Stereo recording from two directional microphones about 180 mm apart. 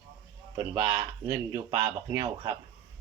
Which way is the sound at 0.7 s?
15° right (ahead or behind).